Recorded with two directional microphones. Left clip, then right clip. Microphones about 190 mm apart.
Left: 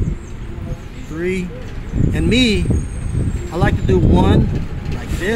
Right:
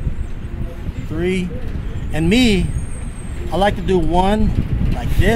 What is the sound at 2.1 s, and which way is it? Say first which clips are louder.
Speech: even; 40° right (ahead or behind).